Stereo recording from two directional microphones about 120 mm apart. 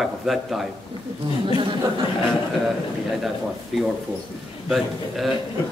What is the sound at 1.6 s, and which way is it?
Speech, 40° right (ahead or behind).